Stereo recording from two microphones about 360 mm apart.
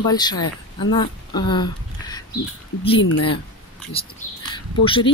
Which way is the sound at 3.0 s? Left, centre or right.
Left.